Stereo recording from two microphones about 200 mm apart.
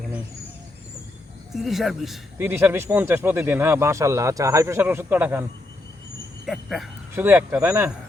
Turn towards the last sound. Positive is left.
turn(degrees=-10)  # may be behind; listen again after turning